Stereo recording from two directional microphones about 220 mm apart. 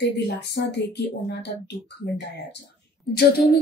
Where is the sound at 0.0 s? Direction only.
50° left (ahead or behind).